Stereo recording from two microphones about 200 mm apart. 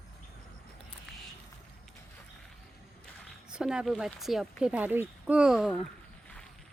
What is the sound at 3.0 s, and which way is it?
Speech, 5° right (ahead or behind).